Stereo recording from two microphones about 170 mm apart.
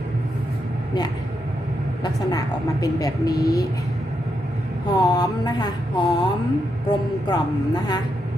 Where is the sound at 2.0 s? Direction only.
20° left (ahead or behind).